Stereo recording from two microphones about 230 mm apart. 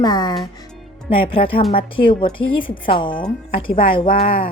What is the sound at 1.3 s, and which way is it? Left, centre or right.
Speech, left.